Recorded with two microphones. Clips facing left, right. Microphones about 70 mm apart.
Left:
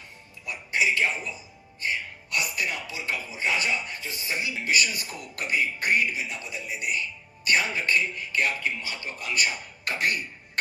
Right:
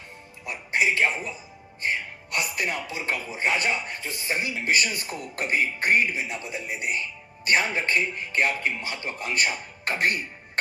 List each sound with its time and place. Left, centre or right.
0.4 s speech: right